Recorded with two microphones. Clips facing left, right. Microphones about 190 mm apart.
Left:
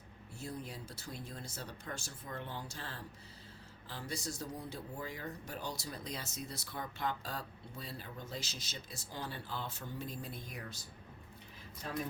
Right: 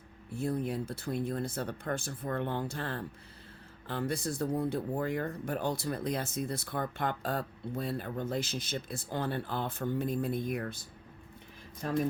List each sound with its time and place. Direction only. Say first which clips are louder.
0.3 s speech: right 12 dB; 55° right (ahead or behind)